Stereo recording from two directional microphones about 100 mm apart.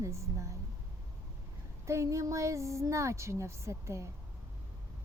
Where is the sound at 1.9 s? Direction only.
30° right (ahead or behind).